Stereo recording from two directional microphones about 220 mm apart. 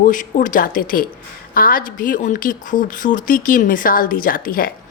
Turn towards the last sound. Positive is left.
turn(degrees=40)  # may be behind; listen again after turning